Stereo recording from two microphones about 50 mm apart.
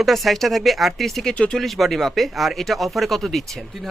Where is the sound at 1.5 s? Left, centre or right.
Centre.